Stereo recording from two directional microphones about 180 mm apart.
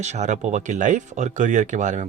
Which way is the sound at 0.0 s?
40° right (ahead or behind).